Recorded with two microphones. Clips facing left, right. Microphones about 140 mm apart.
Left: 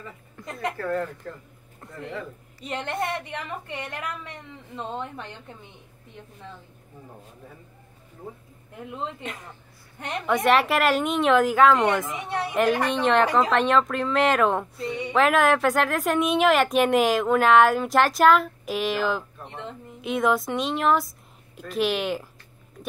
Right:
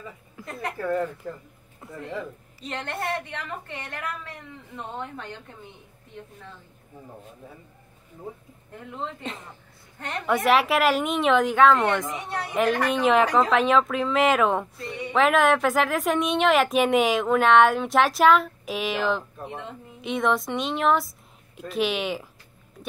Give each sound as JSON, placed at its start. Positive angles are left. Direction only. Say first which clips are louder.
{"t": 0.4, "sound": "speech", "louder": "left 1 dB", "side_deg": -5}
{"t": 2.7, "sound": "a woman's voice", "louder": "left 1 dB", "side_deg": 15}
{"t": 10.2, "sound": "a woman's voice", "louder": "even", "side_deg": 0}
{"t": 12.5, "sound": "speech", "louder": "even", "side_deg": 0}